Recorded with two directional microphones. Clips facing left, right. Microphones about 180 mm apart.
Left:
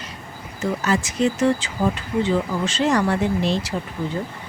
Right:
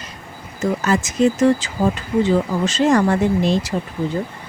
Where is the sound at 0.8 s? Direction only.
45° right (ahead or behind).